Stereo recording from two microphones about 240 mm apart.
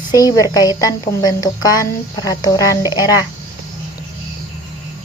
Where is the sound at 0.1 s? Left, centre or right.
Centre.